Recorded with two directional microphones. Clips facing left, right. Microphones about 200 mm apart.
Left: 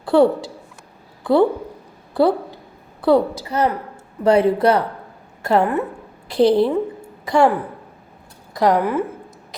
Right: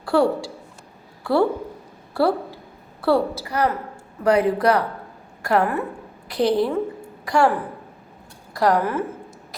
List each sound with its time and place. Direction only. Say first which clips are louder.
0.0 s a woman's voice: left 4 dB; 25° left (ahead or behind)
3.0 s a woman's voice: left 4 dB; 15° left (ahead or behind)
8.5 s a woman's voice: left 3 dB; 20° left (ahead or behind)